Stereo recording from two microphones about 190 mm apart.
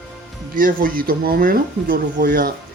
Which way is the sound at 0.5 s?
50° right (ahead or behind).